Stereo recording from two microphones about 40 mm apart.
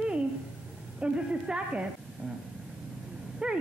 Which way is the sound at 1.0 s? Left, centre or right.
Right.